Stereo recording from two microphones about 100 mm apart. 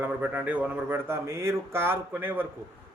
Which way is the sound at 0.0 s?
20° right (ahead or behind).